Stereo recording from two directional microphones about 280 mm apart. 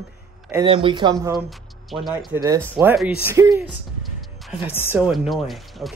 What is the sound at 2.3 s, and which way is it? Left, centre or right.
Speech, centre.